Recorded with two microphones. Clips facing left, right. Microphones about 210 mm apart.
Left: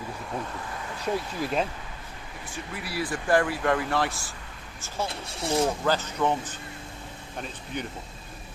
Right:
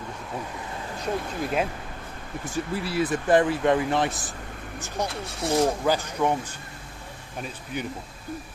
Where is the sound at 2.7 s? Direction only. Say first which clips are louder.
Right 5 dB; 25° right (ahead or behind); by 7.9 s 10° right (ahead or behind).